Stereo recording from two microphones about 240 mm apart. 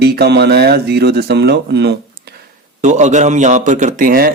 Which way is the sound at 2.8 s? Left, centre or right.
Right.